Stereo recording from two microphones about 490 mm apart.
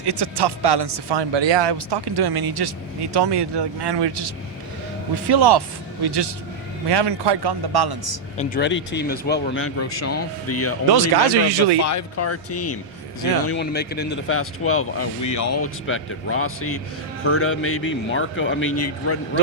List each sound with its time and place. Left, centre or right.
0.0 s speech: right
5.3 s speech: right
8.4 s speech: centre
10.9 s speech: right
11.9 s speech: left